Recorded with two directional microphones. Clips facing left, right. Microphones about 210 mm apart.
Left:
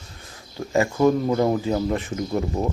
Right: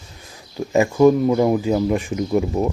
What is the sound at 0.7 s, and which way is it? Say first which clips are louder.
Speech: right 5 dB; 15° right (ahead or behind).